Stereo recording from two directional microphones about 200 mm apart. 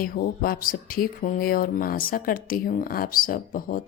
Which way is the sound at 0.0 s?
45° left (ahead or behind).